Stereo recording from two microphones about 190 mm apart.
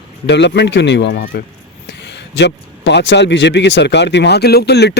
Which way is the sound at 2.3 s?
65° left (ahead or behind).